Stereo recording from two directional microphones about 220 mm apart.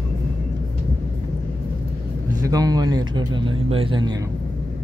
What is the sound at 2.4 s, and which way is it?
Speech, 15° right (ahead or behind).